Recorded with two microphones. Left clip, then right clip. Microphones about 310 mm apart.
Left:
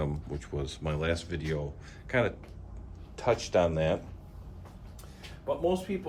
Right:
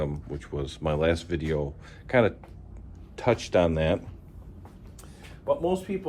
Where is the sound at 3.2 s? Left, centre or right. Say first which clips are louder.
Right 3 dB; right.